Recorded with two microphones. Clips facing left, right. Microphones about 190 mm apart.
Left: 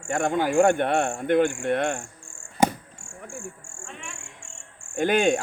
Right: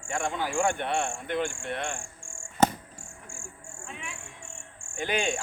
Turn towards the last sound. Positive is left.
turn(degrees=45)  # may be behind; listen again after turning